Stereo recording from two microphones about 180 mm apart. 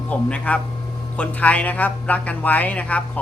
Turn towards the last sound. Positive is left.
turn(degrees=10)  # may be behind; listen again after turning